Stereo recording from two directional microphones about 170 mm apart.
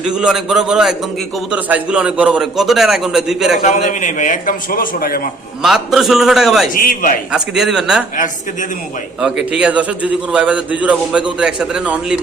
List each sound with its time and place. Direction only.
0.0 s a man's voice: 5° right (ahead or behind)
3.6 s a man's voice: 45° left (ahead or behind); by 5.2 s 60° left (ahead or behind)
5.6 s a man's voice: centre (ahead or behind)
6.7 s a man's voice: 55° left (ahead or behind)
7.3 s a man's voice: 5° right (ahead or behind)
9.2 s a man's voice: 5° right (ahead or behind)